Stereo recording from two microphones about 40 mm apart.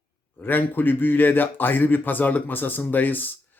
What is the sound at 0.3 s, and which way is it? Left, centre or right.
A man's voice, left.